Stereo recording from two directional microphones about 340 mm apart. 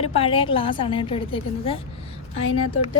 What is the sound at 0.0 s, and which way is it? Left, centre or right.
A woman's voice, centre.